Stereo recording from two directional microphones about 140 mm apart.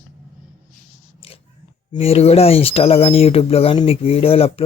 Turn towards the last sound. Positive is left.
turn(degrees=45)  # may be behind; listen again after turning